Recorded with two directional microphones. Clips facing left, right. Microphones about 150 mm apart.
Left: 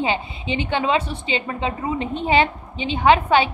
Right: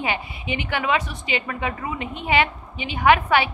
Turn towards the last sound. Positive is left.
turn(degrees=25)  # may be behind; listen again after turning